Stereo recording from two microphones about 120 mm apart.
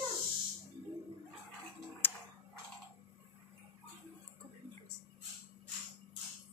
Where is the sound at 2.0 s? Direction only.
15° left (ahead or behind).